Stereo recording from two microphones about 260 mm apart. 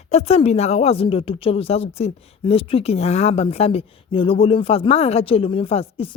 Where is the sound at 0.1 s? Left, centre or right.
Left.